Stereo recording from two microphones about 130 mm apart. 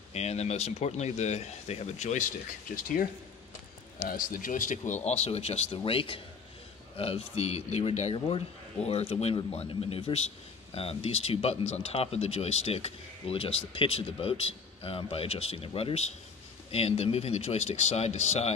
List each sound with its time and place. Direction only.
0.1 s speech: 55° left (ahead or behind)
2.7 s speech: 90° left
4.2 s speech: 90° left; by 18.5 s 60° left (ahead or behind)